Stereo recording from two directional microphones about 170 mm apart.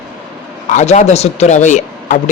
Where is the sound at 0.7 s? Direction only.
45° left (ahead or behind).